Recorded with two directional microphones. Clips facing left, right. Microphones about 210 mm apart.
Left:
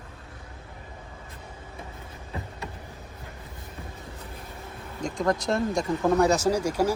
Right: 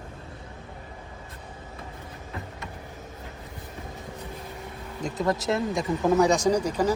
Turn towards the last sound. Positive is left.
turn(degrees=10)  # may be behind; listen again after turning